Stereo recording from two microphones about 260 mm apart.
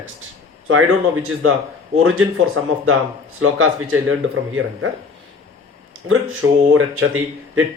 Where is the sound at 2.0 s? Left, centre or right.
Right.